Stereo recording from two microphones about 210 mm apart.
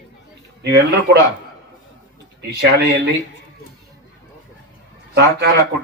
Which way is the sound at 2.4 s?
55° right (ahead or behind).